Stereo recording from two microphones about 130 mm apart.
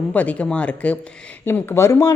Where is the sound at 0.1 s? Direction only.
10° left (ahead or behind).